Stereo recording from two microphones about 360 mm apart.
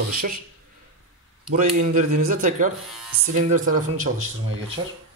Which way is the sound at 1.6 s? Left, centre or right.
Right.